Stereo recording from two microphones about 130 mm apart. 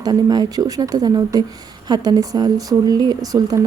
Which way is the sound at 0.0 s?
30° right (ahead or behind).